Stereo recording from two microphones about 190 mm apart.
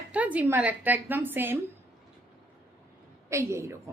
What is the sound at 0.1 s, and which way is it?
Speech, 10° right (ahead or behind).